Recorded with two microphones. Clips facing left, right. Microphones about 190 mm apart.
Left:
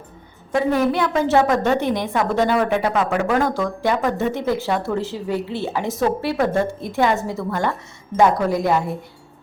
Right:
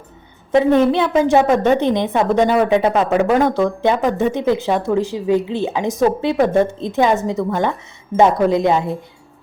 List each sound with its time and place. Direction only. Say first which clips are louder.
0.5 s a woman's voice: right 5 dB; 25° right (ahead or behind)